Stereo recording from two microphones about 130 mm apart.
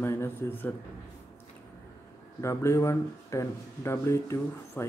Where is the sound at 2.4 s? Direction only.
20° left (ahead or behind).